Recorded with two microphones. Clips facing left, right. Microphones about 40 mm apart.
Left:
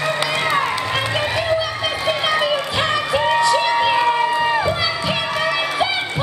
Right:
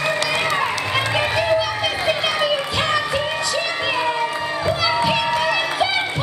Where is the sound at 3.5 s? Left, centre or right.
Centre.